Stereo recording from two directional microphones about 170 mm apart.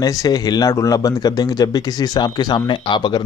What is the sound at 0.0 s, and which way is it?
Speech, 20° left (ahead or behind).